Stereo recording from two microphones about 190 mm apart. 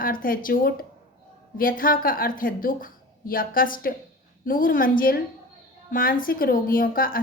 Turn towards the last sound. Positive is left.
turn(degrees=50)  # may be behind; listen again after turning